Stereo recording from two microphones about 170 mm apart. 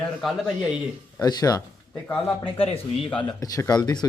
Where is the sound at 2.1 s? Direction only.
5° left (ahead or behind).